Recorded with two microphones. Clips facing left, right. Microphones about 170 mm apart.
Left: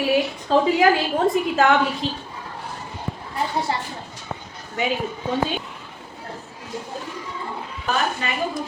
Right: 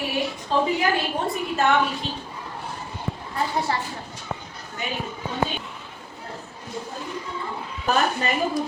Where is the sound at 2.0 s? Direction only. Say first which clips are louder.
Left 4 dB; 90° left.